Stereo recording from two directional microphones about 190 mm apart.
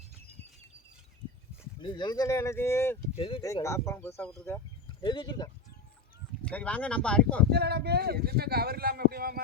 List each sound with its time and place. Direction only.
1.8 s speech: 25° left (ahead or behind)
3.2 s speech: 30° left (ahead or behind)
3.4 s speech: 15° left (ahead or behind)
5.0 s speech: 25° left (ahead or behind)
6.4 s speech: 5° left (ahead or behind)
7.5 s speech: 60° right (ahead or behind)